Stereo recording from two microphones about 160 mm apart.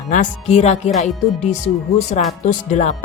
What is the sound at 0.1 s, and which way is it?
Speech, 45° left (ahead or behind).